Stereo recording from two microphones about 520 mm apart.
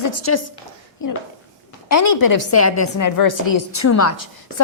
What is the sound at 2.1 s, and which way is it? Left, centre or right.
A woman's voice, left.